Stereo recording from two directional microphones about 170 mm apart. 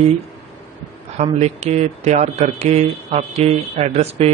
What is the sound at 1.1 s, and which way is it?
Speech, 40° right (ahead or behind).